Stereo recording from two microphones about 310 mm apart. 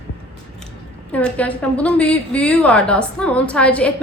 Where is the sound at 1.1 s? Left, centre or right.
Centre.